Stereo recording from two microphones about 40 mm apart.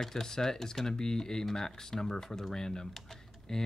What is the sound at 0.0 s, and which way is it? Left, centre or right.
Speech, centre.